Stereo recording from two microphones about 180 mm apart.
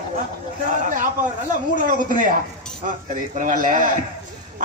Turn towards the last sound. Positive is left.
turn(degrees=-45)  # may be behind; listen again after turning